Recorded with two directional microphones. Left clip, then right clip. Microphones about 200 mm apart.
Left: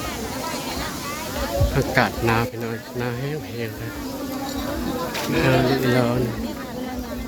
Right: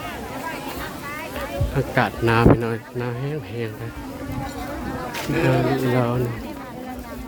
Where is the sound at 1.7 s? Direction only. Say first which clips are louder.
Even; 10° right (ahead or behind).